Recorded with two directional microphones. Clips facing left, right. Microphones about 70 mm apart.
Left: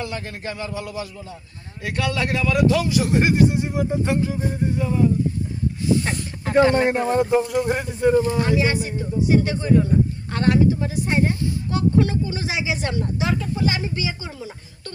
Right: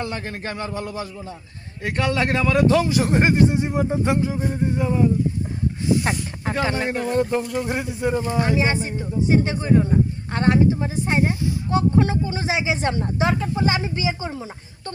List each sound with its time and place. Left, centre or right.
0.0 s a man's voice: right
3.5 s speech: right
6.0 s snake: centre
6.8 s speech: centre; by 14.9 s right